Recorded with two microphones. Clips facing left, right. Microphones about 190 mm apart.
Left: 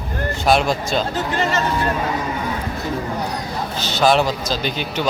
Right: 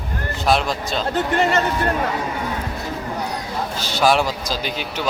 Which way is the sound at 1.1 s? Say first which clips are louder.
Right 2 dB; 60° right (ahead or behind).